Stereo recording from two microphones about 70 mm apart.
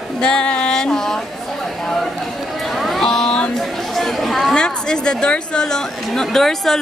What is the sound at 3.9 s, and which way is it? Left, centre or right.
A woman's voice, centre.